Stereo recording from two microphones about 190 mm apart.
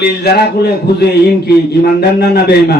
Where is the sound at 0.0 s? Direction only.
55° left (ahead or behind).